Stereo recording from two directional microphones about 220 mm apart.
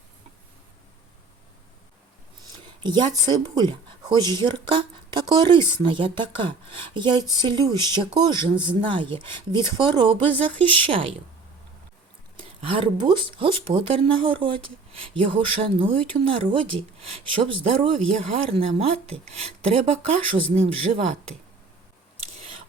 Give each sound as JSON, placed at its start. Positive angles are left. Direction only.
{"t": 2.6, "sound": "speech", "side_deg": -20}
{"t": 12.4, "sound": "speech", "side_deg": -25}